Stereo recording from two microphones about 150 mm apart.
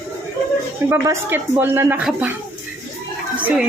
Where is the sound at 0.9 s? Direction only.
15° right (ahead or behind).